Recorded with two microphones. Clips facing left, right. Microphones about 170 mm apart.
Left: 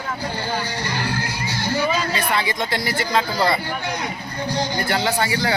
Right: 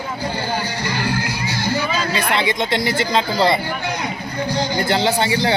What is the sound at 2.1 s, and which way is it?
Speech, 20° right (ahead or behind).